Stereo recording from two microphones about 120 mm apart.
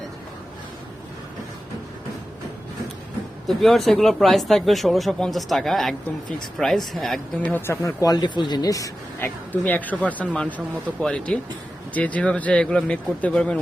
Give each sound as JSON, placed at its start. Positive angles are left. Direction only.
{"t": 3.4, "sound": "speech", "side_deg": 0}
{"t": 7.4, "sound": "speech", "side_deg": 20}
{"t": 9.5, "sound": "speech", "side_deg": 15}